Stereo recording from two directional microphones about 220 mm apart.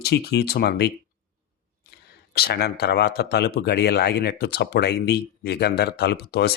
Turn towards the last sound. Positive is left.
turn(degrees=50)  # may be behind; listen again after turning